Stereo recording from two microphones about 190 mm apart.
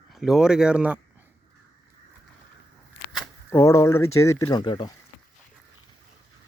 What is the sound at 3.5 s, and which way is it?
Speech, 15° left (ahead or behind).